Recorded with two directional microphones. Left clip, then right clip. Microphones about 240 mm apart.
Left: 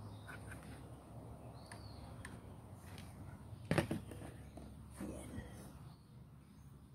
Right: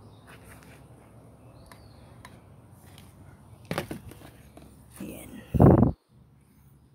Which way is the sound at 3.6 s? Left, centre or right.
Right.